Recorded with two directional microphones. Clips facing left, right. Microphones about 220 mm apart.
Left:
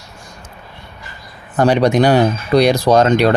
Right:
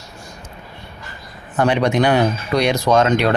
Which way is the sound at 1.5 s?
35° left (ahead or behind).